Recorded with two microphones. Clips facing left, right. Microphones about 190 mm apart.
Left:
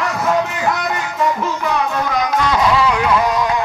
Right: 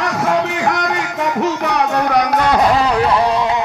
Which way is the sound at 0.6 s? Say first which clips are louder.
Right 2 dB; 70° right (ahead or behind).